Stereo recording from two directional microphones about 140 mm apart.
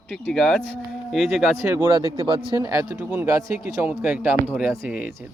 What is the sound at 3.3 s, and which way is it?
Speech, 25° right (ahead or behind).